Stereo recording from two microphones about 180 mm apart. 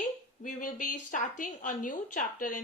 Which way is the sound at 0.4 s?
45° left (ahead or behind).